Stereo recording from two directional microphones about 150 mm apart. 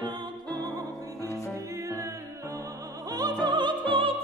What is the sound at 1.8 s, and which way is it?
Music, 20° right (ahead or behind).